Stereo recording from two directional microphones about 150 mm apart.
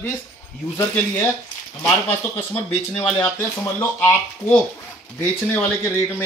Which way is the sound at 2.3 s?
15° left (ahead or behind).